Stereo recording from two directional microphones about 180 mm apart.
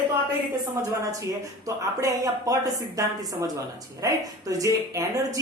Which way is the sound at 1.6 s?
20° right (ahead or behind).